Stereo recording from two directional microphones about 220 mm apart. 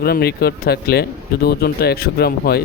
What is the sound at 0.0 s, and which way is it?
Speech, 45° left (ahead or behind).